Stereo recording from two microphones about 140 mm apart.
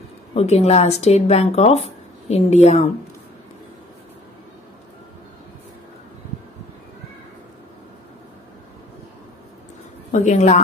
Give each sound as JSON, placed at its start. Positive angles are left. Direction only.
{"t": 0.3, "sound": "speech", "side_deg": 45}
{"t": 10.1, "sound": "a woman's voice", "side_deg": 55}